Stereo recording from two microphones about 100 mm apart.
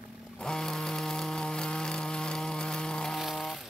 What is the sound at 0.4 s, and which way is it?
Chainsaw, 5° left (ahead or behind).